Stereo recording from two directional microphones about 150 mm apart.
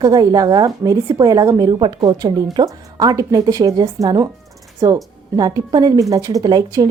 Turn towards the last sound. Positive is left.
turn(degrees=-25)  # may be behind; listen again after turning